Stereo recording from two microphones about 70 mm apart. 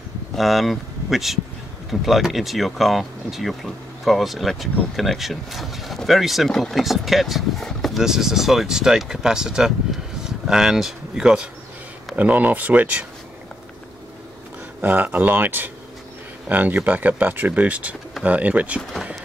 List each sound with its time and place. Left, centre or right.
0.4 s speech: centre
7.6 s boat: centre
8.0 s speech: centre
12.2 s speech: right
14.8 s speech: right